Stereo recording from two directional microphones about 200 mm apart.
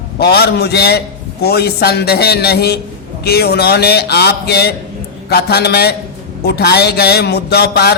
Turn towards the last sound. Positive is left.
turn(degrees=55)  # may be behind; listen again after turning